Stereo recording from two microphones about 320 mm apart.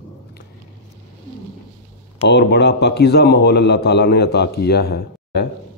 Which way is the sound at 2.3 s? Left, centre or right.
Left.